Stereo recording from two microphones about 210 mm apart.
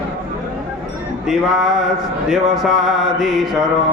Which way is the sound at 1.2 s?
Centre (ahead or behind).